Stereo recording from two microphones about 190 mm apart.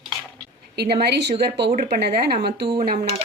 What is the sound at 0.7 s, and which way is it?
A woman's voice, 60° right (ahead or behind).